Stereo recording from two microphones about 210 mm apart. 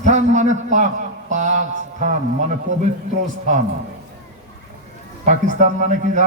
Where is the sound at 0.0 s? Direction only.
35° right (ahead or behind).